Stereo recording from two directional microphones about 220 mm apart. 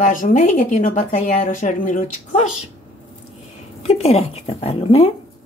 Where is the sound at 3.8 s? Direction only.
30° left (ahead or behind).